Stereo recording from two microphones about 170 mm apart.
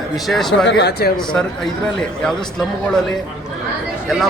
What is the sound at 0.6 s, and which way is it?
Speech, 90° left.